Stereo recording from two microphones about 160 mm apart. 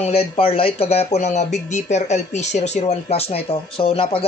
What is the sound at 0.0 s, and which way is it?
Speech, 40° left (ahead or behind).